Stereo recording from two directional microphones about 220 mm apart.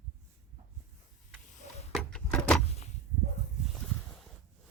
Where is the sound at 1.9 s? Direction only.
5° left (ahead or behind).